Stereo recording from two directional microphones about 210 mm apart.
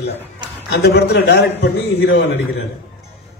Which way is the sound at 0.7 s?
50° left (ahead or behind).